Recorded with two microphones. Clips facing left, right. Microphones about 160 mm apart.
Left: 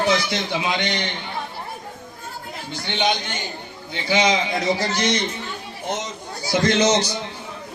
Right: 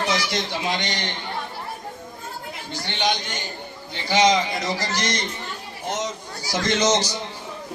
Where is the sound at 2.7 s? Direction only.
60° left (ahead or behind).